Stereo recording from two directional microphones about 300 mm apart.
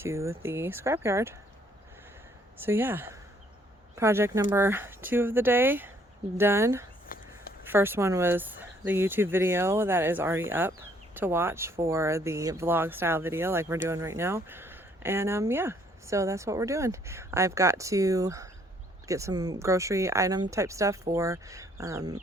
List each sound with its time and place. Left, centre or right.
0.0 s speech: centre
2.6 s speech: centre
7.1 s a sound: left
7.7 s speech: centre